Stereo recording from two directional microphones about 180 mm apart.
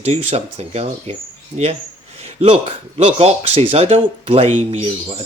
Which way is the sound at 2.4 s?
35° right (ahead or behind).